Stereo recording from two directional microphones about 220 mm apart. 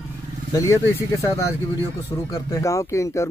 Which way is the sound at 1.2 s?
15° left (ahead or behind).